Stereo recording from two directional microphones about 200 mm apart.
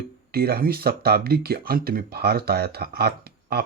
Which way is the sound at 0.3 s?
50° right (ahead or behind).